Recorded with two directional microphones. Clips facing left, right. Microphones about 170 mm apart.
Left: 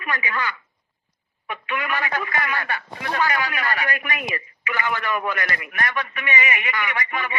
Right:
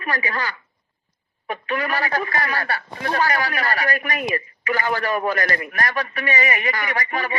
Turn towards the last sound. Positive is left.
turn(degrees=-35)  # may be behind; listen again after turning